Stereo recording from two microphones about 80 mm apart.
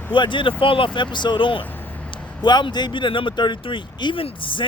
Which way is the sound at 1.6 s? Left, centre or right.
Left.